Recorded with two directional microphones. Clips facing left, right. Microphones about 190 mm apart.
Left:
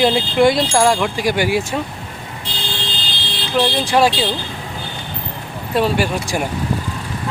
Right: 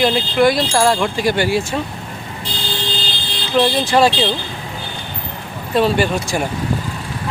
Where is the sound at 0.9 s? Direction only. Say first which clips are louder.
Right 1 dB; 10° left (ahead or behind).